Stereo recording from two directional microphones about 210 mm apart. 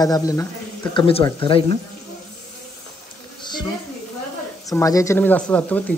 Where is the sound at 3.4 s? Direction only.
20° left (ahead or behind).